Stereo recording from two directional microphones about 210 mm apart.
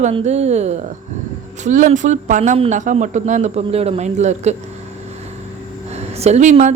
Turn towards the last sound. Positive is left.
turn(degrees=-35)  # may be behind; listen again after turning